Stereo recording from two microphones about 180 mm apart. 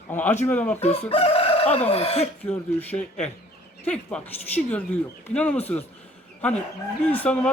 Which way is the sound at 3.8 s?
5° left (ahead or behind).